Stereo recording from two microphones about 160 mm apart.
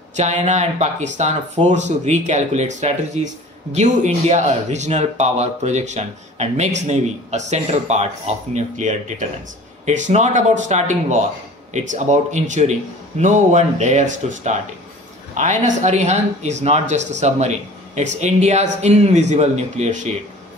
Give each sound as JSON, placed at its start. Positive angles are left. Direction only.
{"t": 0.1, "sound": "speech", "side_deg": -45}